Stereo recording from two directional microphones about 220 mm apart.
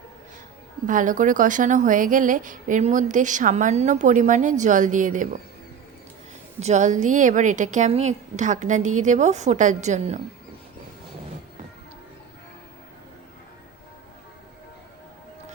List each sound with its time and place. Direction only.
0.9 s a woman's voice: 35° right (ahead or behind)
6.6 s a woman's voice: 30° right (ahead or behind)